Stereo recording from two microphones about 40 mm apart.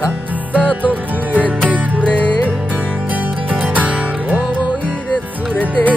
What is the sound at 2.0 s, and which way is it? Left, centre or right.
Music, left.